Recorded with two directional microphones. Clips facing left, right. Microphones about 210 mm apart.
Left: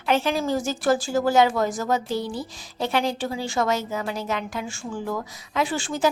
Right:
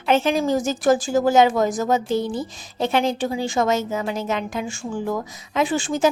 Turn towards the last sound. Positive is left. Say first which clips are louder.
# right 4 dB
turn(degrees=-20)  # may be behind; listen again after turning